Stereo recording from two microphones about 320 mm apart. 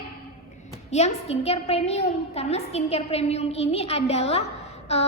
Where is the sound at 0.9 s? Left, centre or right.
Centre.